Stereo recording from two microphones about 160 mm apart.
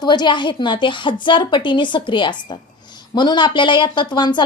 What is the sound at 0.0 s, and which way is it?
A woman's voice, 25° left (ahead or behind).